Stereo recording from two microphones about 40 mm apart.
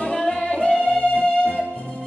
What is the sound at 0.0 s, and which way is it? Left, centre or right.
Music, left.